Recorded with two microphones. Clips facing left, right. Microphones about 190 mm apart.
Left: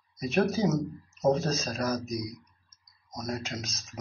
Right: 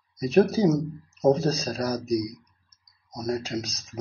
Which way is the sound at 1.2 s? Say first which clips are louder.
Right 4 dB; 35° right (ahead or behind).